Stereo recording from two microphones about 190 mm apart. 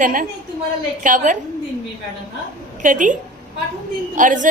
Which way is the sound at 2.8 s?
45° right (ahead or behind).